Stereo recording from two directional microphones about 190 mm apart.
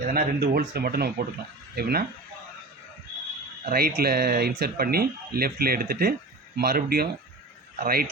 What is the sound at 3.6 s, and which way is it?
Speech, 55° right (ahead or behind).